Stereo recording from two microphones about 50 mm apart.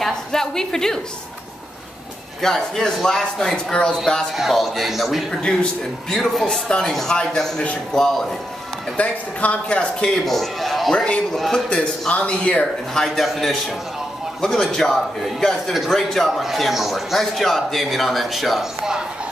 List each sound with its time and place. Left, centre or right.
0.0 s a woman's voice: centre
2.4 s speech: centre
3.5 s speech: centre
4.4 s a man's voice: centre
5.4 s speech: centre
6.1 s a man's voice: centre
8.9 s speech: left
10.2 s a man's voice: centre
11.5 s speech: left
12.9 s a man's voice: centre